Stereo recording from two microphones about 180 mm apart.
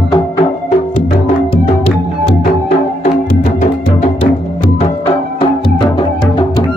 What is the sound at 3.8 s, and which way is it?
Music, 35° left (ahead or behind).